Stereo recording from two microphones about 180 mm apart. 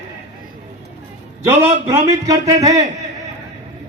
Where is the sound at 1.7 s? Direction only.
20° right (ahead or behind).